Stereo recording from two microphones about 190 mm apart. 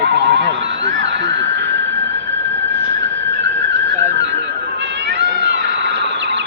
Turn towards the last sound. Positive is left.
turn(degrees=-65)  # may be behind; listen again after turning